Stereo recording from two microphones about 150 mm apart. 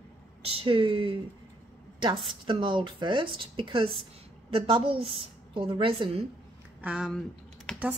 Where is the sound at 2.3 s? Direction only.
35° right (ahead or behind).